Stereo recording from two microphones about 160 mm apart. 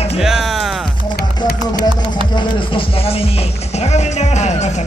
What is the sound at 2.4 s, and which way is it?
Speech, 30° left (ahead or behind).